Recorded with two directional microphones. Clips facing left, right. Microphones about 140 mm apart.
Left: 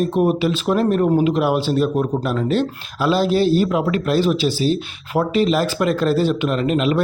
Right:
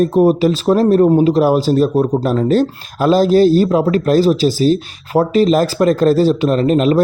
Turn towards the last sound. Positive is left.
turn(degrees=-40)  # may be behind; listen again after turning